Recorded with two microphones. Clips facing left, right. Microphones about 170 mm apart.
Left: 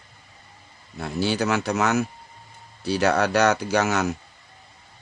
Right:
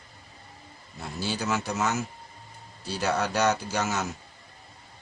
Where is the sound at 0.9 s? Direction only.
70° left (ahead or behind).